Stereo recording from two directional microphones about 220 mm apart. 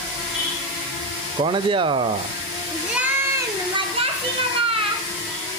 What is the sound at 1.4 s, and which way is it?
Speech, 20° right (ahead or behind).